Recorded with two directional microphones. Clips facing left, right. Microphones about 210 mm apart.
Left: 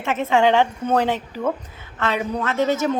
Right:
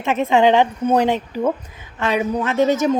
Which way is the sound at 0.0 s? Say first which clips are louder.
Right 3 dB; 15° right (ahead or behind).